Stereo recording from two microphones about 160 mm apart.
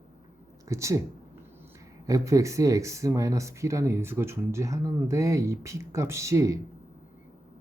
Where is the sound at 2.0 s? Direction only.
20° right (ahead or behind).